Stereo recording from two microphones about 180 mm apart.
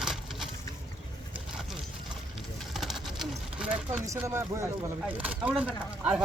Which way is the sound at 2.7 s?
Centre (ahead or behind).